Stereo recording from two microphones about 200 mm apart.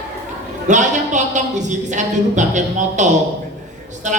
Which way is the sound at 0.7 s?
35° right (ahead or behind).